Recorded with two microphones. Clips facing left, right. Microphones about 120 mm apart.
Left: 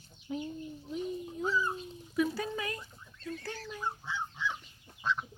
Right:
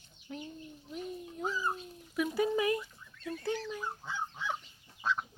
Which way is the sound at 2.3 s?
20° right (ahead or behind).